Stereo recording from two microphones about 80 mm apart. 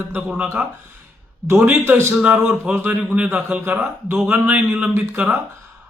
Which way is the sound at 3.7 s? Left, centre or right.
Right.